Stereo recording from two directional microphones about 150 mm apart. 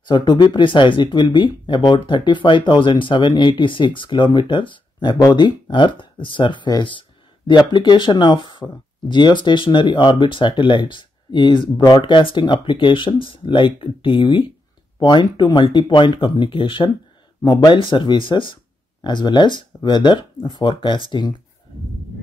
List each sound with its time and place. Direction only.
0.0 s speech: 30° left (ahead or behind)